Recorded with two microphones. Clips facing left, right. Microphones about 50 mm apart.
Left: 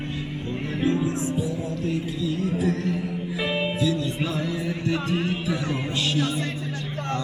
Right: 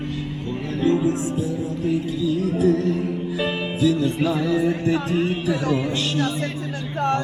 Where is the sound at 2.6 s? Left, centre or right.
Left.